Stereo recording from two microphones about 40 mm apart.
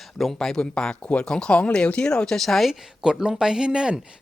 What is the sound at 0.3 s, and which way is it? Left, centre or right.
Speech, centre.